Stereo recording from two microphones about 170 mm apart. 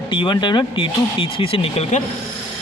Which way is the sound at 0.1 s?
25° left (ahead or behind).